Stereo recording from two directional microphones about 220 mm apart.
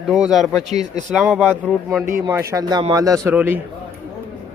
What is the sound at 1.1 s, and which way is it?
Speech, 5° right (ahead or behind).